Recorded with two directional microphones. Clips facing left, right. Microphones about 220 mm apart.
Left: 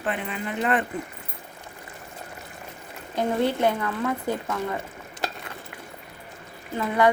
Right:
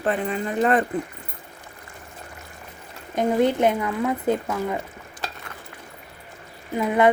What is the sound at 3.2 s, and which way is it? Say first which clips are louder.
Speech: right 4 dB; 20° right (ahead or behind).